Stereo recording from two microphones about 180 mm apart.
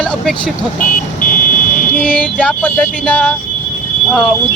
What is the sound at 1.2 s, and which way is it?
Vehicle, 50° left (ahead or behind).